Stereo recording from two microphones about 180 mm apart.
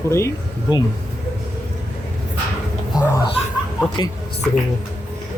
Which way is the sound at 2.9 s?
25° left (ahead or behind).